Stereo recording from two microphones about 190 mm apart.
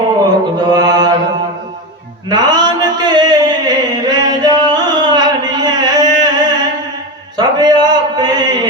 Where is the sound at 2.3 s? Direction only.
20° right (ahead or behind).